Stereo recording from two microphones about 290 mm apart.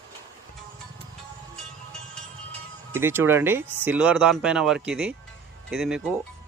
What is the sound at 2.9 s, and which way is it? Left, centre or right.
Speech, centre.